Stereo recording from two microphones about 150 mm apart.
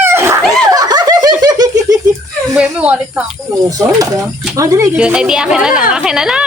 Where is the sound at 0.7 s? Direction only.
25° right (ahead or behind).